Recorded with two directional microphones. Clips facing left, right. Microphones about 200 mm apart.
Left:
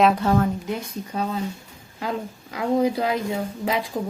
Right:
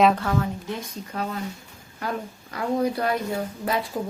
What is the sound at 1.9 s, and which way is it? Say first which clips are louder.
A woman's voice: left 2 dB; 15° left (ahead or behind).